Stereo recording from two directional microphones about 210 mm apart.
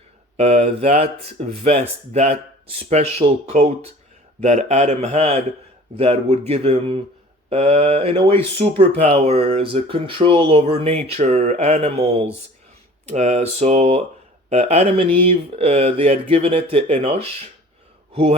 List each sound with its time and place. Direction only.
0.3 s a man's voice: 30° right (ahead or behind)